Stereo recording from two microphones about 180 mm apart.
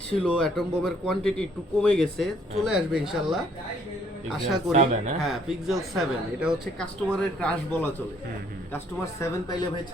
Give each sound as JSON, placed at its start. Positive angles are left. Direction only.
{"t": 0.2, "sound": "a man's voice", "side_deg": 5}
{"t": 4.7, "sound": "speech", "side_deg": -40}
{"t": 5.2, "sound": "a man's voice", "side_deg": 0}
{"t": 9.2, "sound": "speech", "side_deg": 20}